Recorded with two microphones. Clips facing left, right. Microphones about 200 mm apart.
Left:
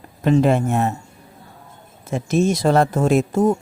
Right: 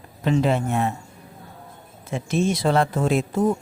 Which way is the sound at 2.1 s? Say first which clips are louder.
Left 4 dB; 45° left (ahead or behind).